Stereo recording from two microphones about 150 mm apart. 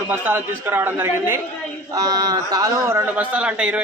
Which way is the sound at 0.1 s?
15° right (ahead or behind).